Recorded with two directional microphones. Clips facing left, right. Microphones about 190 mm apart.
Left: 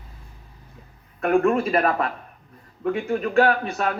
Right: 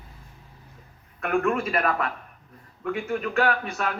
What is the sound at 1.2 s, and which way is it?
A man's voice, 30° left (ahead or behind).